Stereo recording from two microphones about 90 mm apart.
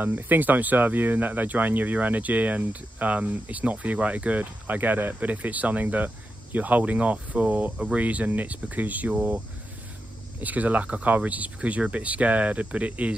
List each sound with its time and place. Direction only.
0.0 s speech: 20° right (ahead or behind)
10.4 s speech: 15° right (ahead or behind)